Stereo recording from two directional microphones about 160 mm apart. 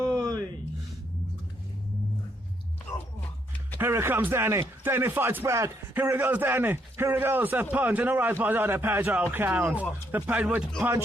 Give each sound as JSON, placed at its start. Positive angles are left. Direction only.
{"t": 0.2, "sound": "gasp", "side_deg": -25}
{"t": 3.8, "sound": "a man's voice", "side_deg": -15}